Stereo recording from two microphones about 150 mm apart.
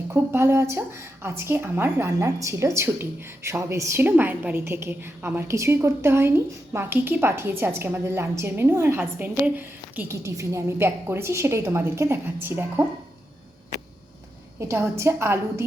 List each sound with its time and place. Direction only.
0.1 s a woman's voice: 15° right (ahead or behind)
14.6 s a woman's voice: 20° right (ahead or behind)